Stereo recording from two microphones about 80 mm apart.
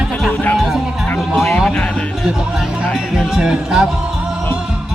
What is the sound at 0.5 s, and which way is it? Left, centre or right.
Music, centre.